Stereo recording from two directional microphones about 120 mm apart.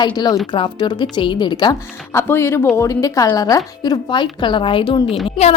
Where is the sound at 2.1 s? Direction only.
20° left (ahead or behind); by 5.2 s 45° left (ahead or behind).